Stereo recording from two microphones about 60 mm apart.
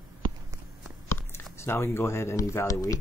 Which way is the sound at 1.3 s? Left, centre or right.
Left.